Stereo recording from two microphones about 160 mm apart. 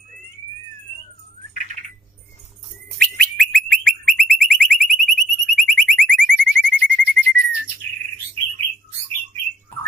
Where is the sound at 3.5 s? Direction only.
5° left (ahead or behind).